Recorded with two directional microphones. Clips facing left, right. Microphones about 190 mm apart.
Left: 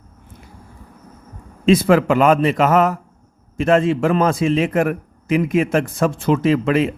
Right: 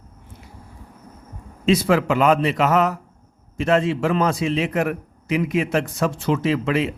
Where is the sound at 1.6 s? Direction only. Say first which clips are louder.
Left 4 dB; 50° left (ahead or behind).